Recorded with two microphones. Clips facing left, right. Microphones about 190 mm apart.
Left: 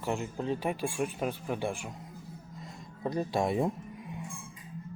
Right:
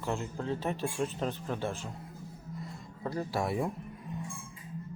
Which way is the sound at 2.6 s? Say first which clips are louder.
Left 2 dB; 20° left (ahead or behind).